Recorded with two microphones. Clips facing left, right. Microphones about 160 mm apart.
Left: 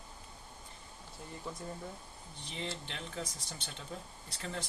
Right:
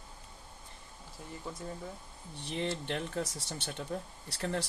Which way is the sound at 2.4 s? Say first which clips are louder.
Right 7 dB; 60° right (ahead or behind).